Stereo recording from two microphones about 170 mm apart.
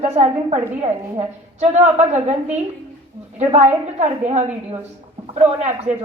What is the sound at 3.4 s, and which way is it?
A woman's voice, 45° right (ahead or behind).